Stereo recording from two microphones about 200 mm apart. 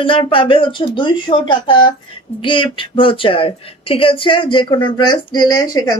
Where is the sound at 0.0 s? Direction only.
25° left (ahead or behind).